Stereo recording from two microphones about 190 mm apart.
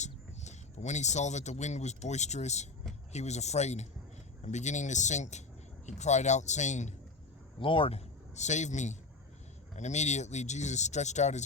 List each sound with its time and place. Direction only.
0.0 s speech: 35° left (ahead or behind)
7.6 s a man's voice: 25° left (ahead or behind)